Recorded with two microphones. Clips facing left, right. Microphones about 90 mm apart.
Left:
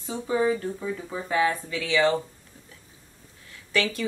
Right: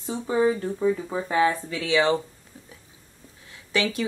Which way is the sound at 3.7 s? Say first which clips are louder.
Right 1 dB; 20° right (ahead or behind).